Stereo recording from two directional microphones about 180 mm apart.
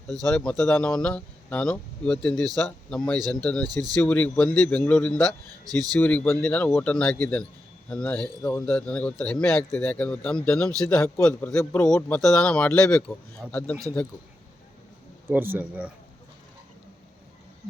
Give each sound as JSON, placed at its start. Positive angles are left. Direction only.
{"t": 0.3, "sound": "a man's voice", "side_deg": 5}
{"t": 5.6, "sound": "speech", "side_deg": -20}
{"t": 6.0, "sound": "a man's voice", "side_deg": 10}
{"t": 15.3, "sound": "speech", "side_deg": -10}